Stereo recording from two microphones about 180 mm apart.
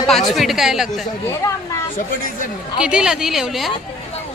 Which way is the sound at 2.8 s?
5° right (ahead or behind).